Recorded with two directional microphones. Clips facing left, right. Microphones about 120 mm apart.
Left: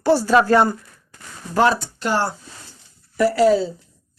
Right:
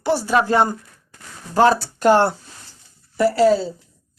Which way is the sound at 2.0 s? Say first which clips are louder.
Right 8 dB; 55° right (ahead or behind).